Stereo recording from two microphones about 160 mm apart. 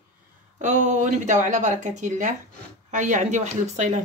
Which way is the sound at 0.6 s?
50° right (ahead or behind).